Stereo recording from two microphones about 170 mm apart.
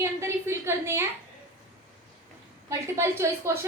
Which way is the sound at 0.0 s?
15° right (ahead or behind).